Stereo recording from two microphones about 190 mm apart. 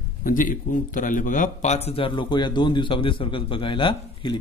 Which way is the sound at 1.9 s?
25° left (ahead or behind).